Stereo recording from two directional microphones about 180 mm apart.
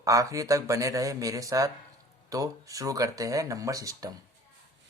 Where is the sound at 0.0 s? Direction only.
20° right (ahead or behind).